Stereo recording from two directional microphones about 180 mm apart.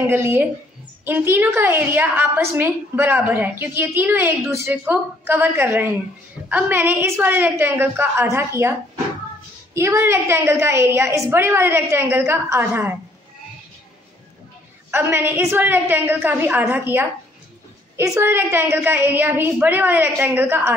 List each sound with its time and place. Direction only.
0.1 s a woman's voice: 15° right (ahead or behind)
14.9 s a woman's voice: 15° right (ahead or behind)